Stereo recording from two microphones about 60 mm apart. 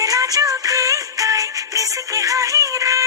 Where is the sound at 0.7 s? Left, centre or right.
Right.